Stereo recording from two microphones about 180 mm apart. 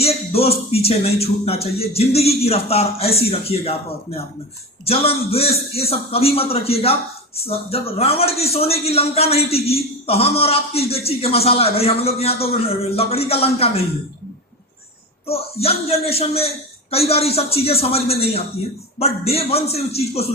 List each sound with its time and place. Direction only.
0.0 s a man's voice: 35° left (ahead or behind)
4.9 s a man's voice: 35° left (ahead or behind)
15.3 s a man's voice: 35° left (ahead or behind)